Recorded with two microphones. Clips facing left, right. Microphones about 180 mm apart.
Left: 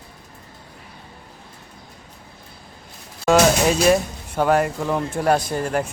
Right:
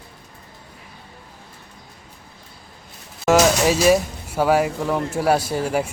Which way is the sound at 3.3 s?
5° right (ahead or behind).